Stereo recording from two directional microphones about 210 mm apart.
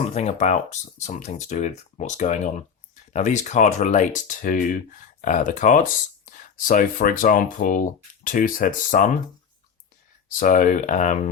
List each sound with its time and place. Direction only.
0.1 s speech: 30° left (ahead or behind)
10.2 s speech: 40° left (ahead or behind)